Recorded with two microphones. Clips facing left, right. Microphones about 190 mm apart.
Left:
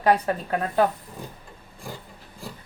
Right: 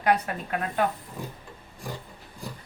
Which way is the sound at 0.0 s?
35° left (ahead or behind).